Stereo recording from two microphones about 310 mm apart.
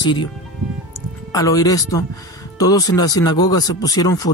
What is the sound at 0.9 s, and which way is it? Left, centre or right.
Speech, centre.